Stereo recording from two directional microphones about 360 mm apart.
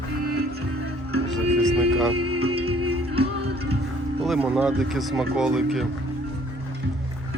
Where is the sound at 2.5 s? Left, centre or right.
Right.